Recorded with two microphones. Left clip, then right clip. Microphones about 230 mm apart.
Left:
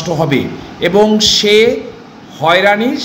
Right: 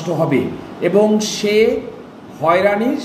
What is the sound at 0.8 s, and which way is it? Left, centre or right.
Speech, centre.